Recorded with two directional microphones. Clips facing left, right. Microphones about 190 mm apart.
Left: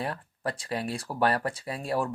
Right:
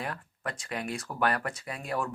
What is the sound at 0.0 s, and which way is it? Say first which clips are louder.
Speech: left 4 dB; 30° left (ahead or behind).